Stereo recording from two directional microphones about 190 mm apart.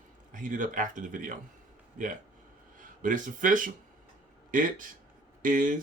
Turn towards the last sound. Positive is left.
turn(degrees=-45)  # may be behind; listen again after turning